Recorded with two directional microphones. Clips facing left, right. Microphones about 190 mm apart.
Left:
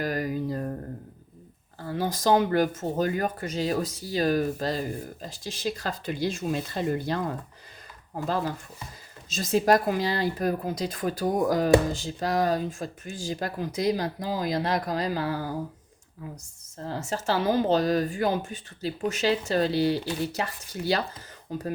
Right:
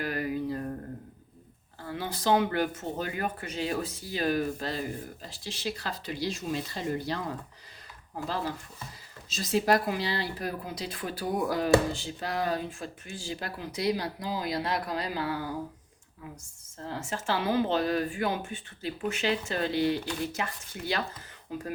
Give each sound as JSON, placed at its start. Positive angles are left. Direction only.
{"t": 0.0, "sound": "mantra", "side_deg": 40}
{"t": 1.9, "sound": "speech", "side_deg": 40}
{"t": 9.3, "sound": "speech", "side_deg": 45}
{"t": 16.7, "sound": "speech", "side_deg": 35}